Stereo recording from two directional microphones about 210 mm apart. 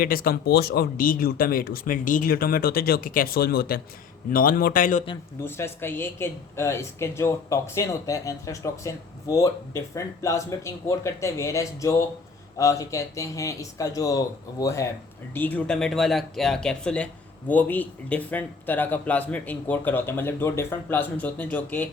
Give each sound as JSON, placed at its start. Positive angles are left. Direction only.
{"t": 0.0, "sound": "speech", "side_deg": 45}
{"t": 5.4, "sound": "speech", "side_deg": 10}